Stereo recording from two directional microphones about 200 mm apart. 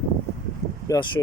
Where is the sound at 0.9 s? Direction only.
25° left (ahead or behind).